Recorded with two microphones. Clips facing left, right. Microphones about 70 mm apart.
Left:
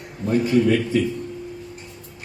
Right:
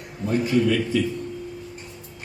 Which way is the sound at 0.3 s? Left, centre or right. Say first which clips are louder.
Left 3 dB; left.